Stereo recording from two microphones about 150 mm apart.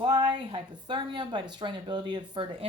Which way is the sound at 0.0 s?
30° right (ahead or behind).